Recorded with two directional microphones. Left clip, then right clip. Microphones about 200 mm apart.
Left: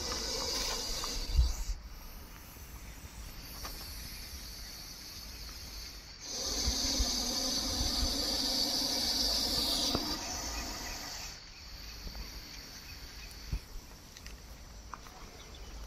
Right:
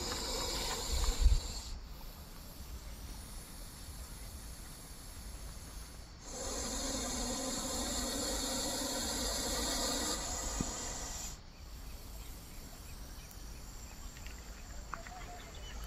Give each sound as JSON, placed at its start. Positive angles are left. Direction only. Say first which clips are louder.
{"t": 0.2, "sound": "music", "louder": "left 3 dB", "side_deg": -5}
{"t": 6.3, "sound": "insect", "louder": "left 6 dB", "side_deg": 0}
{"t": 10.0, "sound": "train", "louder": "left 1 dB", "side_deg": -30}